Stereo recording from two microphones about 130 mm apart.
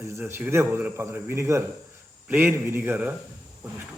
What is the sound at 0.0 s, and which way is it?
Speech, 20° right (ahead or behind).